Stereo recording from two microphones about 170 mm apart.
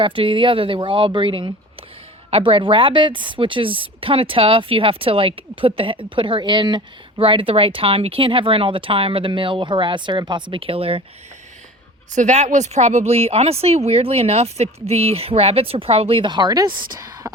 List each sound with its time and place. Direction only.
0.0 s a woman's voice: 30° right (ahead or behind)
12.1 s a woman's voice: 45° right (ahead or behind); by 17.3 s 20° right (ahead or behind)